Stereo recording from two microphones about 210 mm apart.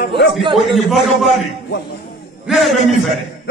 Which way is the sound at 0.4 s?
25° right (ahead or behind).